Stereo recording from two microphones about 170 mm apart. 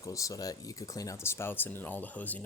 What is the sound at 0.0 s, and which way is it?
Speech, 20° left (ahead or behind).